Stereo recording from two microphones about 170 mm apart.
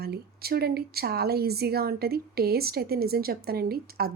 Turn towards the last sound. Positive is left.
turn(degrees=-60)  # may be behind; listen again after turning